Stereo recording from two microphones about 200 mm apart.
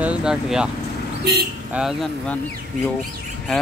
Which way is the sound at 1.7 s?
Centre (ahead or behind).